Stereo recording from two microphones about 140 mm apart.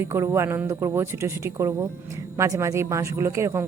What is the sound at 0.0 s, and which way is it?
Speech, 20° right (ahead or behind).